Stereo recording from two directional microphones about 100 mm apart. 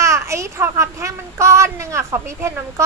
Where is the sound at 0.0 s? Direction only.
30° right (ahead or behind).